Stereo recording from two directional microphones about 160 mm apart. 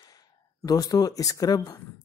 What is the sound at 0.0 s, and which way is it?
Speech, 25° left (ahead or behind).